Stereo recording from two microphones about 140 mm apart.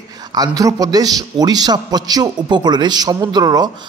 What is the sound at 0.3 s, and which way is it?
A man's voice, 25° right (ahead or behind).